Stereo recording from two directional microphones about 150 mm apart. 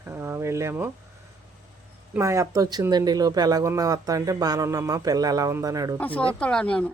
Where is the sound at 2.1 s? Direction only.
20° right (ahead or behind).